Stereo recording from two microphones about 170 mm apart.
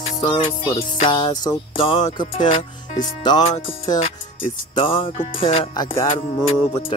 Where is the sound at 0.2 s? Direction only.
30° left (ahead or behind).